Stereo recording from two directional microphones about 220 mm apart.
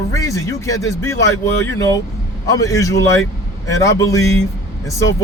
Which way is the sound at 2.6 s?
15° left (ahead or behind).